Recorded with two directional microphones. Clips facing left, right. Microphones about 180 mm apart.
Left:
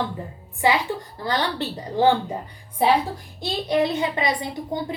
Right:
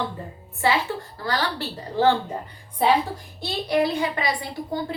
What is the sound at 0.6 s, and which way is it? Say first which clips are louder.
A woman's voice: left 1 dB; 15° left (ahead or behind).